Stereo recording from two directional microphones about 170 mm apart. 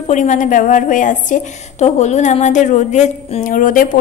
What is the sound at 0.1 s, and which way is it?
A woman's voice, 45° left (ahead or behind).